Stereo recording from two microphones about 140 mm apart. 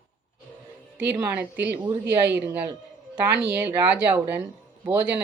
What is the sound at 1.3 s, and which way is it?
Speech, 15° right (ahead or behind).